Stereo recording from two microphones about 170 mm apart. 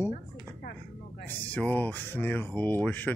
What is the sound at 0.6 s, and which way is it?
Chopping, 70° left (ahead or behind).